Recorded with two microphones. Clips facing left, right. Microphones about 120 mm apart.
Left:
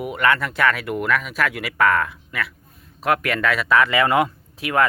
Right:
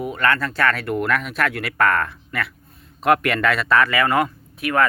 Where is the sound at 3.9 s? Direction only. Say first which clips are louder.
Left 1 dB; 20° left (ahead or behind).